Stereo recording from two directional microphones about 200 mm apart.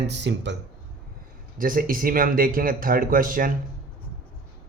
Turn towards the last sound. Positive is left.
turn(degrees=-45)  # may be behind; listen again after turning